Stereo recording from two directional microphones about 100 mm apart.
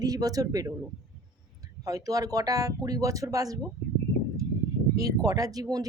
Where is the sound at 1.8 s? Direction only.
35° right (ahead or behind).